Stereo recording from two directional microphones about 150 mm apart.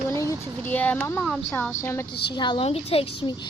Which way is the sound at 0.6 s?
10° left (ahead or behind).